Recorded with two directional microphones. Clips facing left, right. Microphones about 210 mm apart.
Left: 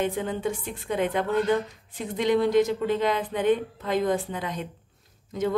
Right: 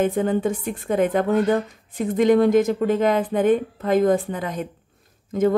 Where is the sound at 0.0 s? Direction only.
50° right (ahead or behind).